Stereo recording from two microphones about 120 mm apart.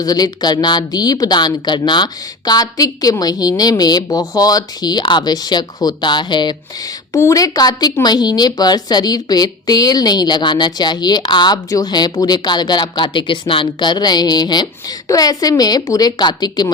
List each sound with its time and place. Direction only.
0.0 s a woman's voice: 35° left (ahead or behind)
7.1 s a woman's voice: 25° left (ahead or behind)